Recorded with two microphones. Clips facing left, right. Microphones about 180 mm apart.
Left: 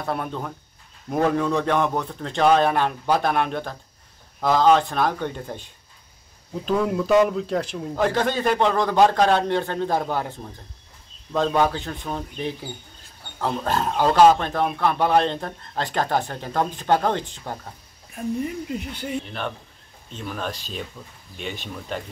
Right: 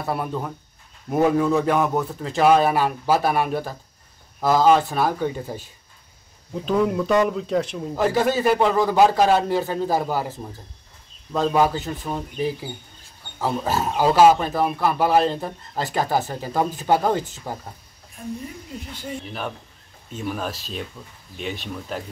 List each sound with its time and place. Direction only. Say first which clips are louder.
0.0 s speech: right 2 dB; 5° right (ahead or behind)
19.2 s speech: even; 5° right (ahead or behind)